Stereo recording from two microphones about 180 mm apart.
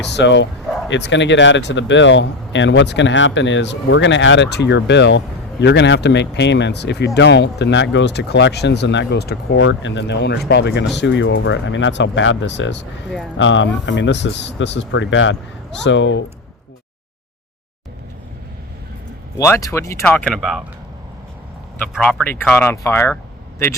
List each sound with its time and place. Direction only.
0.0 s speech: 75° left (ahead or behind)
13.4 s speech: 90° left
13.8 s speech: 80° left
19.4 s speech: 15° left (ahead or behind); by 20.6 s centre (ahead or behind)
21.9 s speech: 5° left (ahead or behind)